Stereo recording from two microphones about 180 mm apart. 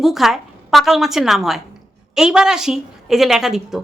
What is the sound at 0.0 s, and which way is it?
A woman's voice, centre (ahead or behind).